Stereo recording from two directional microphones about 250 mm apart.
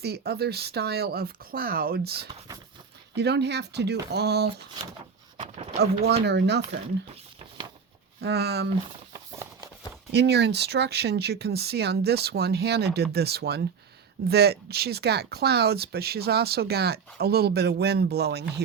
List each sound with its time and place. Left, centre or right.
0.0 s speech: right
5.4 s speech: right
5.8 s speech: right
8.2 s speech: right
10.1 s speech: right